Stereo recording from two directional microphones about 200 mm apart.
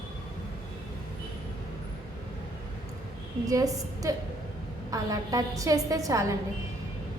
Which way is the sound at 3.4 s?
15° right (ahead or behind).